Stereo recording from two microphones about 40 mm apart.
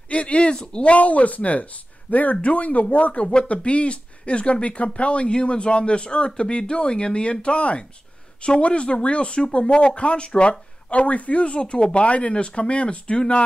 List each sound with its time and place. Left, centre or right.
0.1 s speech: left
0.5 s speech: left
0.8 s speech: left